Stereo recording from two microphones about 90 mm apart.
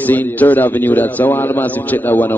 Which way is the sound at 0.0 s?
20° left (ahead or behind).